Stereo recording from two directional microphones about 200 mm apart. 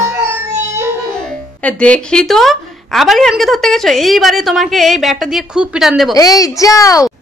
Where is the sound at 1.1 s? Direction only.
5° left (ahead or behind).